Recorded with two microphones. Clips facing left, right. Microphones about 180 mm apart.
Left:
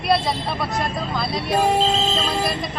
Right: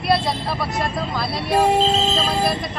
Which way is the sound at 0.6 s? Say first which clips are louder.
Right 1 dB; centre (ahead or behind).